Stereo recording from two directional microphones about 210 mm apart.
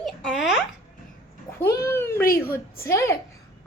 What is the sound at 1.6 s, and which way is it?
A child's voice, 10° left (ahead or behind).